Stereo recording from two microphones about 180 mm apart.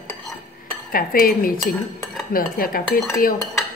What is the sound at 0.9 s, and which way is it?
Dishes, 55° left (ahead or behind).